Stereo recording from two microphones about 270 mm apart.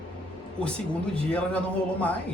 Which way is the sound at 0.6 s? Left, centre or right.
Centre.